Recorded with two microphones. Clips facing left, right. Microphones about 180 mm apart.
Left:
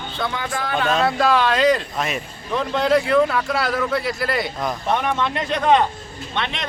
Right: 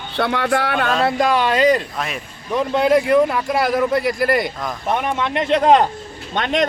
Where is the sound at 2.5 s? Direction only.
10° right (ahead or behind).